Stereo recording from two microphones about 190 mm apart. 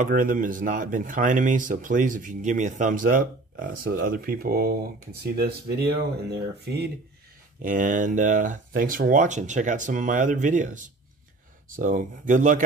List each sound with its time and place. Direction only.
0.0 s speech: 45° right (ahead or behind)
7.6 s speech: 45° right (ahead or behind)